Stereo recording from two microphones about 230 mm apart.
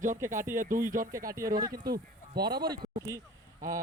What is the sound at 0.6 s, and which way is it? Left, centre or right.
Speech, right.